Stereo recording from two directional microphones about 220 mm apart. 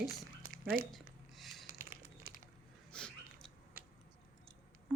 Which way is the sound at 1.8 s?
40° right (ahead or behind).